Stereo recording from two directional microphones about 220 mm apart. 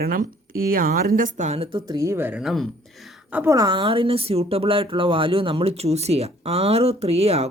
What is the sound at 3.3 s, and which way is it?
A woman's voice, 15° right (ahead or behind).